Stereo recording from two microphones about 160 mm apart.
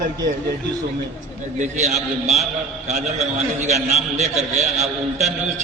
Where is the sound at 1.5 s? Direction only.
45° right (ahead or behind).